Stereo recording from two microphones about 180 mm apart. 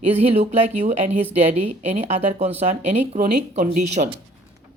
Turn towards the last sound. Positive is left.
turn(degrees=-40)  # may be behind; listen again after turning